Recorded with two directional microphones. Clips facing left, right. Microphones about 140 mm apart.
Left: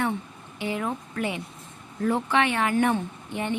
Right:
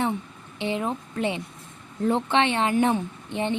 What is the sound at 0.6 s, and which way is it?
Speech, 25° right (ahead or behind).